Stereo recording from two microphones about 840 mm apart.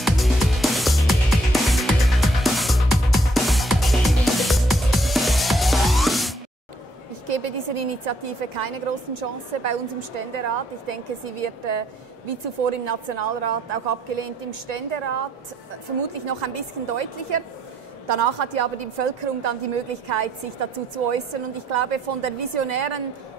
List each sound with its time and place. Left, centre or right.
0.0 s music: centre
7.2 s a woman's voice: right